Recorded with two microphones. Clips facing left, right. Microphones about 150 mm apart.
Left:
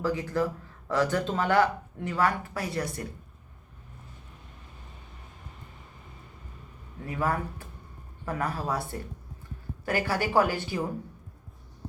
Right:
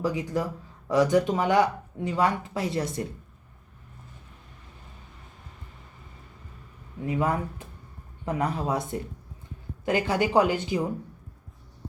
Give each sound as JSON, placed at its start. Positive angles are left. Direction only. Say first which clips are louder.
{"t": 0.0, "sound": "speech", "louder": "even", "side_deg": -15}
{"t": 7.0, "sound": "speech", "louder": "right 3 dB", "side_deg": -20}